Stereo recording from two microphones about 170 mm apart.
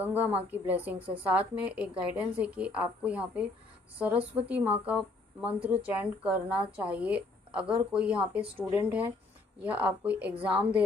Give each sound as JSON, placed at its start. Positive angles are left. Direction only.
{"t": 0.0, "sound": "a woman's voice", "side_deg": -10}
{"t": 0.9, "sound": "a woman's voice", "side_deg": -35}
{"t": 1.2, "sound": "a woman's voice", "side_deg": -10}